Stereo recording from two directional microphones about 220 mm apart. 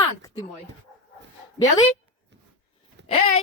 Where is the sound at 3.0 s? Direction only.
55° right (ahead or behind).